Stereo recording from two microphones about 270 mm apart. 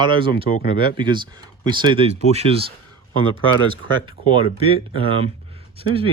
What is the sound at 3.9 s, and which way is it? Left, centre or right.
Speech, centre.